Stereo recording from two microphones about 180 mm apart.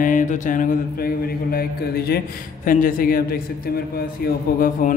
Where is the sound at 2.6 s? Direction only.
50° left (ahead or behind).